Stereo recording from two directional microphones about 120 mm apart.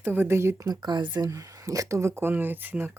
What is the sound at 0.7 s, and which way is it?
A woman's voice, 35° right (ahead or behind).